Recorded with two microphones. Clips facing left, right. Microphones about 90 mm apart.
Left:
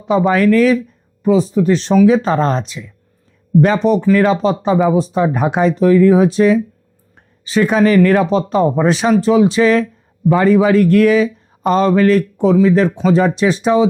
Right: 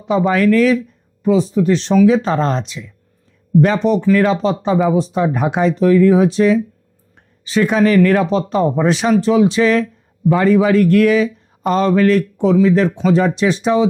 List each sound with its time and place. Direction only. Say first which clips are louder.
0.0 s speech: left 1 dB; 35° left (ahead or behind)